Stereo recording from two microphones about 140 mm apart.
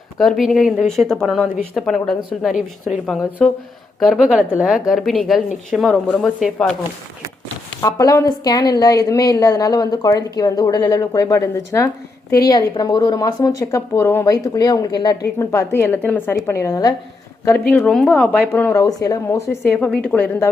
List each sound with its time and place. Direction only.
0.2 s speech: centre (ahead or behind)
3.4 s a woman's voice: 5° left (ahead or behind)
7.8 s speech: 25° left (ahead or behind)
17.7 s a woman's voice: 10° left (ahead or behind)
18.8 s a woman's voice: 25° left (ahead or behind); by 20.5 s 10° left (ahead or behind)